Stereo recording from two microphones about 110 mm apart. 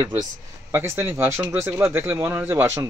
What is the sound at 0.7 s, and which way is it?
A man's voice, 25° right (ahead or behind).